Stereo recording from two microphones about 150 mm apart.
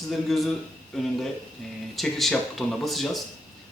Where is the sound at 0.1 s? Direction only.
Centre (ahead or behind).